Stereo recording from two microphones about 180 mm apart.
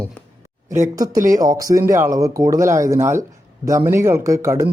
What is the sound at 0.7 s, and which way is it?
Speech, 20° right (ahead or behind).